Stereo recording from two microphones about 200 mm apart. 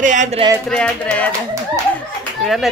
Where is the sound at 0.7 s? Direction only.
5° left (ahead or behind).